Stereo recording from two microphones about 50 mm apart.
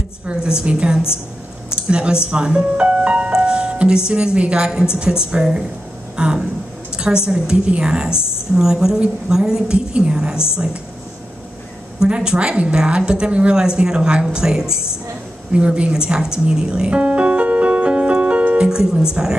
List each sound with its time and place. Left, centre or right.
0.3 s a woman's voice: centre
12.0 s a woman's voice: centre
15.5 s music: right
18.6 s speech: centre